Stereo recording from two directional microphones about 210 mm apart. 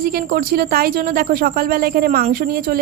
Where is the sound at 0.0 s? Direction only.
45° right (ahead or behind).